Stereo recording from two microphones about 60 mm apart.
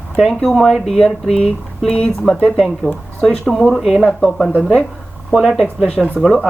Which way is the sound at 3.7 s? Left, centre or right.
Centre.